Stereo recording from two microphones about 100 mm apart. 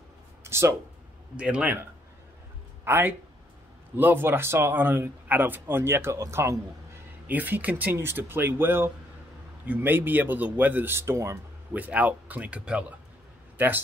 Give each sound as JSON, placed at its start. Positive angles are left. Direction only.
{"t": 0.4, "sound": "a sound", "side_deg": -25}
{"t": 1.3, "sound": "speech", "side_deg": -10}
{"t": 7.2, "sound": "speech", "side_deg": -20}
{"t": 11.7, "sound": "speech", "side_deg": -15}